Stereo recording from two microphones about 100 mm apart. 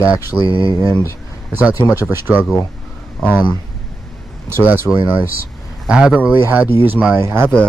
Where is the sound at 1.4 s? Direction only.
15° right (ahead or behind).